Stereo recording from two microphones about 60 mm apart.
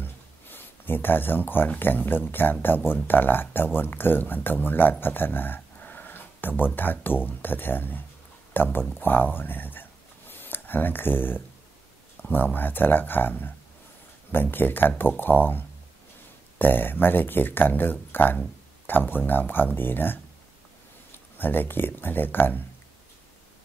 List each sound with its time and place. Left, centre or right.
0.0 s a sound: left
1.8 s speech: left
21.4 s speech: left